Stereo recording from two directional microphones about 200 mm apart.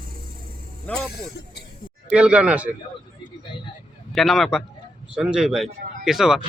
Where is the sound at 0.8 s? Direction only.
5° left (ahead or behind).